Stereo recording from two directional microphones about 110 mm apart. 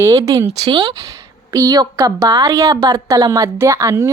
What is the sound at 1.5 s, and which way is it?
A woman's voice, 35° right (ahead or behind).